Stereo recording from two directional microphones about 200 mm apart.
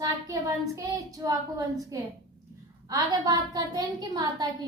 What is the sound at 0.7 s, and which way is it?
Speech, 15° right (ahead or behind).